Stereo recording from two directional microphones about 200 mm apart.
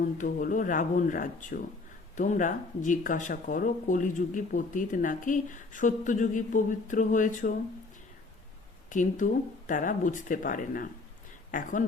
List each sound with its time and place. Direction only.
0.2 s speech: 40° left (ahead or behind)
8.9 s speech: 40° left (ahead or behind)